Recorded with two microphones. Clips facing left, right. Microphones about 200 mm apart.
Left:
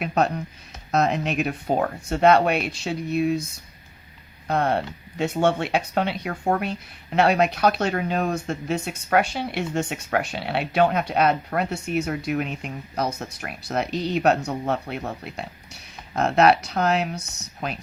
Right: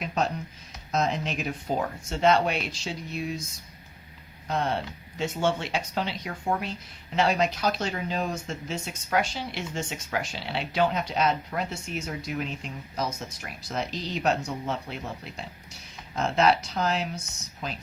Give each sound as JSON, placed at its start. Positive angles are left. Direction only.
{"t": 0.0, "sound": "speech", "side_deg": 60}
{"t": 4.4, "sound": "speech", "side_deg": 60}